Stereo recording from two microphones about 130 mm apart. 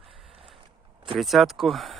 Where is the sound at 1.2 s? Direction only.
Centre (ahead or behind).